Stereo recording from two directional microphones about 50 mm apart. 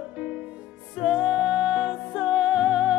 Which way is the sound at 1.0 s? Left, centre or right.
Centre.